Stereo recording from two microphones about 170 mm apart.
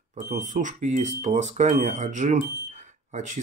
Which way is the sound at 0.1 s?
50° right (ahead or behind).